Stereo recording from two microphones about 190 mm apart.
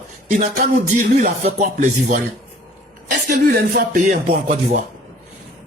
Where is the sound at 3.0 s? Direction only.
55° right (ahead or behind).